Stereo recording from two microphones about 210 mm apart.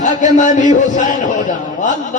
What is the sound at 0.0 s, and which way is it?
A man's voice, 35° left (ahead or behind).